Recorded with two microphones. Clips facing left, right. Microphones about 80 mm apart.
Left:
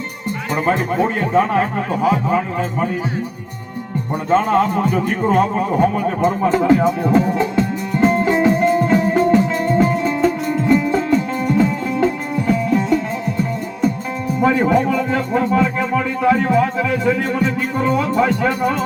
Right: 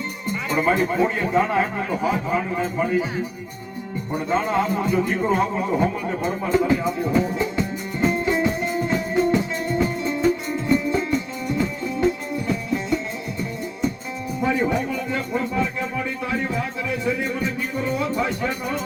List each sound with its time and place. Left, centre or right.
0.9 s a man's voice: left
4.3 s music: left
10.7 s music: left
14.4 s music: left